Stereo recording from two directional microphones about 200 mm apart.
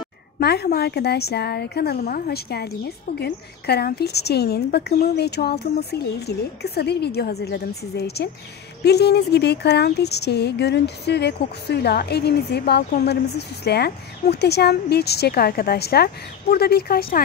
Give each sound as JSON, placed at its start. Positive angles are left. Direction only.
{"t": 0.4, "sound": "speech", "side_deg": 55}